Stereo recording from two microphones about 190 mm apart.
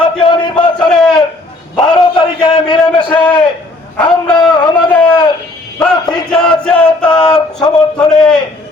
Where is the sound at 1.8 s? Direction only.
25° left (ahead or behind).